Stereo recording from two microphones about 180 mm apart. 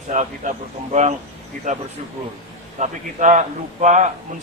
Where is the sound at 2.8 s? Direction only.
40° right (ahead or behind).